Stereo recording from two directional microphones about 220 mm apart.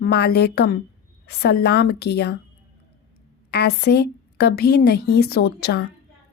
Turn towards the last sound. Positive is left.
turn(degrees=45)  # may be behind; listen again after turning